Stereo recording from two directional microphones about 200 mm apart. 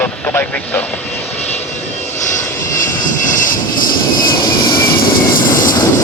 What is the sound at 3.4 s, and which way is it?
Vehicle, 45° left (ahead or behind).